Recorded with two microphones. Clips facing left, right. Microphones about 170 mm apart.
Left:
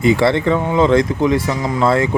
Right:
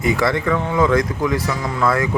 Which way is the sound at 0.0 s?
25° left (ahead or behind).